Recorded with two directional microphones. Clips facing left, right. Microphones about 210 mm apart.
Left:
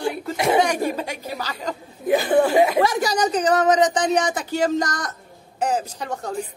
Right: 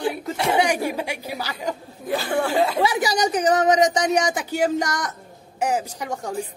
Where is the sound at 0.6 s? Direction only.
10° right (ahead or behind).